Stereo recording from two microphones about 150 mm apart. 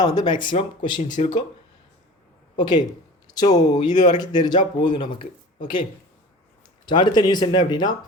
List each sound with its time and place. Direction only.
0.0 s speech: 30° left (ahead or behind)
2.6 s speech: 30° left (ahead or behind)
6.8 s speech: 30° left (ahead or behind)